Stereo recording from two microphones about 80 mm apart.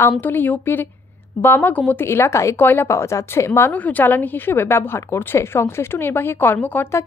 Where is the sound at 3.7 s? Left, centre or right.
Left.